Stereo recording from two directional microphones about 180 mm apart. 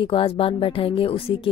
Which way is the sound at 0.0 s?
30° left (ahead or behind).